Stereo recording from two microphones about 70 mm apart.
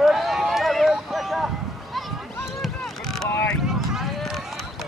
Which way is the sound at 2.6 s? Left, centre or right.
Centre.